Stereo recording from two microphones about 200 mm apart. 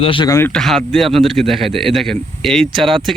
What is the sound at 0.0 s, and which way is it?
Speech, 25° left (ahead or behind).